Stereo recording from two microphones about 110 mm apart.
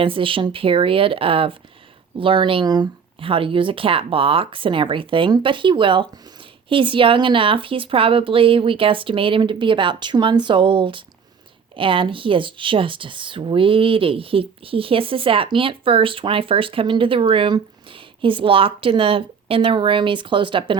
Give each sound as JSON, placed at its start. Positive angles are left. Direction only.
{"t": 0.0, "sound": "speech", "side_deg": -50}